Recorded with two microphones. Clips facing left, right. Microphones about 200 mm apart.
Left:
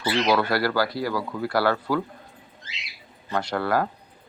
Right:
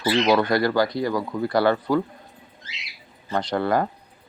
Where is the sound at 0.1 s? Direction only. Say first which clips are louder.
Right 3 dB; 20° right (ahead or behind).